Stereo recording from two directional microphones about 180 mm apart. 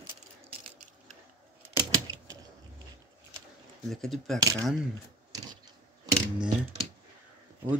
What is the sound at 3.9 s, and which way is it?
Speech, centre (ahead or behind).